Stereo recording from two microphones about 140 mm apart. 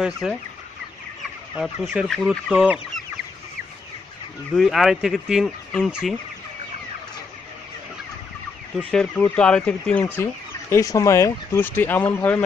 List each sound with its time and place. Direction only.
0.0 s speech: centre (ahead or behind)
1.5 s speech: 5° right (ahead or behind)
4.6 s speech: centre (ahead or behind)
8.9 s speech: 10° left (ahead or behind)
10.7 s speech: 25° left (ahead or behind)